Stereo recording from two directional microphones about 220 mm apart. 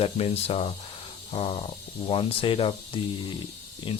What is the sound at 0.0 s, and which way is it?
Speech, 25° left (ahead or behind).